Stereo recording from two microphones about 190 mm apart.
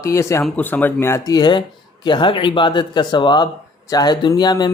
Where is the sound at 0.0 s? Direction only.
15° left (ahead or behind).